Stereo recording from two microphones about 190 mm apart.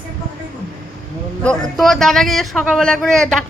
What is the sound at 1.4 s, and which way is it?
A man's voice, centre (ahead or behind).